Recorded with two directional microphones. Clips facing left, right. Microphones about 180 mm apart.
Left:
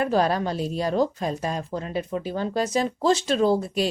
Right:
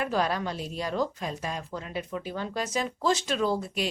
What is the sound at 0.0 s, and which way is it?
Speech, 35° left (ahead or behind).